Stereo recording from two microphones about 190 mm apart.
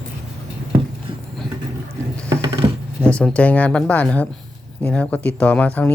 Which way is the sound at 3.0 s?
5° left (ahead or behind).